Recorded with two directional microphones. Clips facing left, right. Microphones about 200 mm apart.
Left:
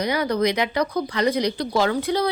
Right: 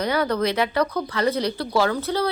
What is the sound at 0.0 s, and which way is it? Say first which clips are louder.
Speech: left 1 dB; 10° left (ahead or behind).